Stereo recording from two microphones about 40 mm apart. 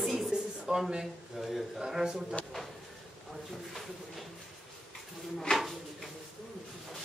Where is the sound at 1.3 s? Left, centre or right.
Centre.